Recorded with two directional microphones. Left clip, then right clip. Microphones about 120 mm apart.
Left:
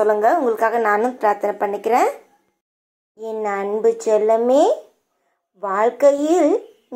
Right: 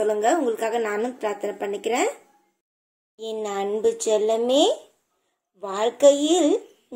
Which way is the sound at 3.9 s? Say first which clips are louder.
Left 6 dB; 25° left (ahead or behind).